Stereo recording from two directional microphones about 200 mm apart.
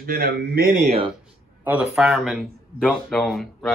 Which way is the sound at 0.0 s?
50° right (ahead or behind).